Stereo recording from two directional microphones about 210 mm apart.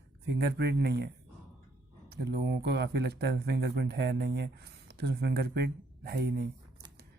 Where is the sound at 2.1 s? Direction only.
50° right (ahead or behind).